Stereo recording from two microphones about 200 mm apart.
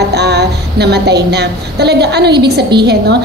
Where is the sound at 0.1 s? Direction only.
55° right (ahead or behind).